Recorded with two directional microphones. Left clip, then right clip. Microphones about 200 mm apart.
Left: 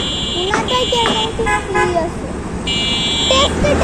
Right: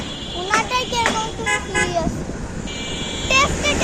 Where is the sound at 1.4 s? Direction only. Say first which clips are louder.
Left 3 dB; 60° right (ahead or behind).